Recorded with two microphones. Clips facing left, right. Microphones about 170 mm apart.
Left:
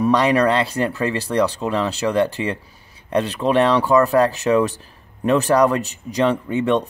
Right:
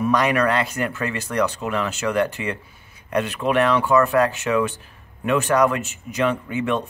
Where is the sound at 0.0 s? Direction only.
30° left (ahead or behind).